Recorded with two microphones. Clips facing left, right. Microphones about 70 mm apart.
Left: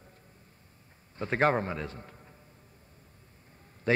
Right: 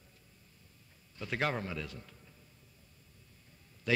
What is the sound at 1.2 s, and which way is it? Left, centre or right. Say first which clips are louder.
Speech: left 8 dB; left.